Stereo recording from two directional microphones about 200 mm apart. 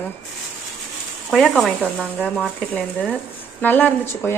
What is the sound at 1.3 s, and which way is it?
A woman's voice, centre (ahead or behind).